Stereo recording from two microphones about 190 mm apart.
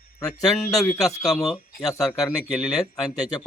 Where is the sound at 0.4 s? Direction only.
Centre (ahead or behind).